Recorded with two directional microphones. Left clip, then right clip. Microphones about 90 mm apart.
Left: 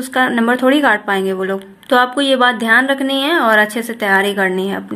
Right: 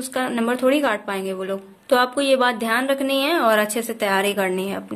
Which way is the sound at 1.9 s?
15° right (ahead or behind).